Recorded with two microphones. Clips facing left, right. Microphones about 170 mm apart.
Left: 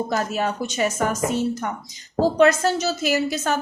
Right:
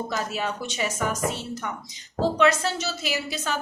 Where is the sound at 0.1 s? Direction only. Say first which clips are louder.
Left 5 dB; 45° left (ahead or behind).